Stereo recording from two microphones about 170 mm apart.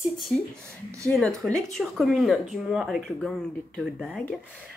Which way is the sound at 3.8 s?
5° right (ahead or behind).